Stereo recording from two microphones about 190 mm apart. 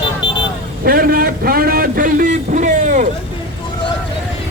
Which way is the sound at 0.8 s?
50° right (ahead or behind).